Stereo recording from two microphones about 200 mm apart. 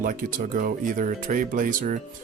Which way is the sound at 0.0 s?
45° right (ahead or behind).